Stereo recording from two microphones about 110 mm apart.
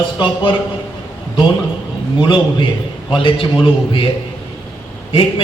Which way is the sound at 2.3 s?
50° left (ahead or behind).